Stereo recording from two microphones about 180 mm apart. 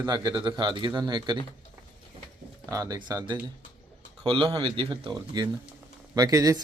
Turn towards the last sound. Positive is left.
turn(degrees=-20)  # may be behind; listen again after turning